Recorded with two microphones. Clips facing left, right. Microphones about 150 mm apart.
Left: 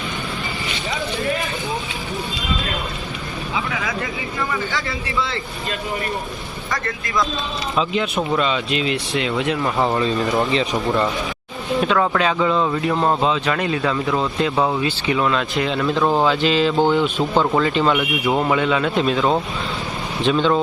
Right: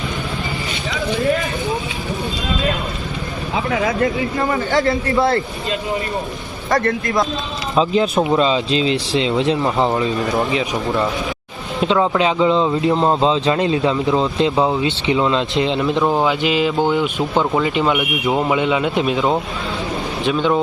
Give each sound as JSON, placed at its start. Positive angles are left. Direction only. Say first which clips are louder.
{"t": 3.5, "sound": "speech", "louder": "right 7 dB", "side_deg": -50}
{"t": 6.7, "sound": "a man's voice", "louder": "right 9 dB", "side_deg": -55}
{"t": 7.8, "sound": "speech", "louder": "right 6 dB", "side_deg": -35}
{"t": 10.5, "sound": "speech", "louder": "even", "side_deg": -5}
{"t": 11.8, "sound": "speech", "louder": "right 3 dB", "side_deg": -20}
{"t": 20.2, "sound": "speech", "louder": "even", "side_deg": -10}